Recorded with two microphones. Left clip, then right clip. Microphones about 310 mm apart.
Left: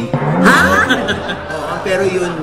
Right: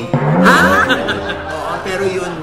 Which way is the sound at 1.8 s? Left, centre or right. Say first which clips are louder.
Left 5 dB; right.